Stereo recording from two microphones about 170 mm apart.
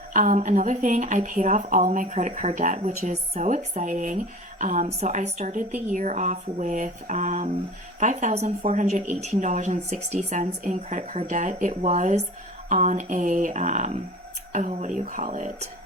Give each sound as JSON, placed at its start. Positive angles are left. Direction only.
{"t": 0.1, "sound": "speech", "side_deg": -50}